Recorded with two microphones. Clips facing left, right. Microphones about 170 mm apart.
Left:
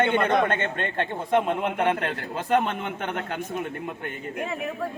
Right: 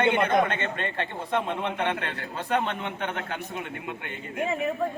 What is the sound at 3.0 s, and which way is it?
Speech, 45° left (ahead or behind).